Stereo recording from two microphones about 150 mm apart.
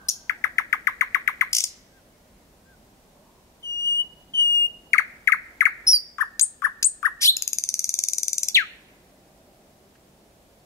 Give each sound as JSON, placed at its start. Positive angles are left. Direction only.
{"t": 0.0, "sound": "bird", "side_deg": 20}
{"t": 3.6, "sound": "a sound", "side_deg": 20}
{"t": 6.1, "sound": "bird", "side_deg": 20}